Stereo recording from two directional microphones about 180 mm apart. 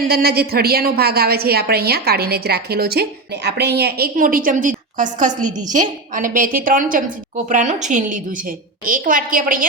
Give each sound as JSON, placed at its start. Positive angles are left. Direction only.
{"t": 0.1, "sound": "a woman's voice", "side_deg": -60}